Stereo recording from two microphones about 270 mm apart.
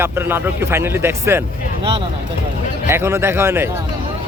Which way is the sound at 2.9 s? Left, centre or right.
Centre.